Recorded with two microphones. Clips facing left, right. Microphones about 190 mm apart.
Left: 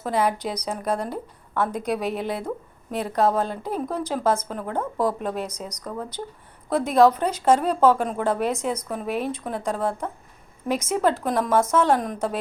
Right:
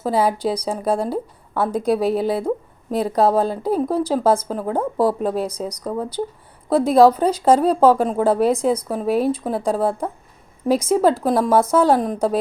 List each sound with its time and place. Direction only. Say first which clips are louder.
0.0 s speech: right 5 dB; 30° right (ahead or behind)